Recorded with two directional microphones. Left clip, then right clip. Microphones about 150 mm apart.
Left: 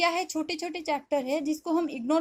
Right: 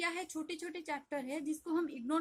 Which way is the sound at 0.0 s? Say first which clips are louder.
Left 12 dB; 25° left (ahead or behind).